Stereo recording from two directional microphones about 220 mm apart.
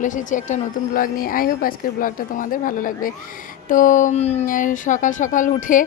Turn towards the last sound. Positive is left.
turn(degrees=35)  # may be behind; listen again after turning